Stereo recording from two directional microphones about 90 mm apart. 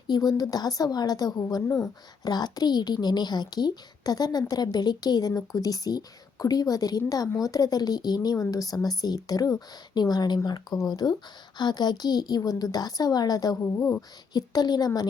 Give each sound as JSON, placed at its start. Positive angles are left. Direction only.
{"t": 0.1, "sound": "speech", "side_deg": 45}
{"t": 1.6, "sound": "speech", "side_deg": 30}
{"t": 2.2, "sound": "speech", "side_deg": 50}
{"t": 13.6, "sound": "speech", "side_deg": 30}
{"t": 14.3, "sound": "speech", "side_deg": 50}